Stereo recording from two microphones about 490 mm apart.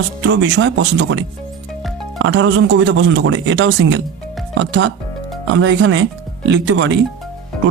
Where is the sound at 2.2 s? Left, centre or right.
Right.